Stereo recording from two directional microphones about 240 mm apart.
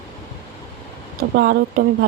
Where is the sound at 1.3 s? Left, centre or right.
Right.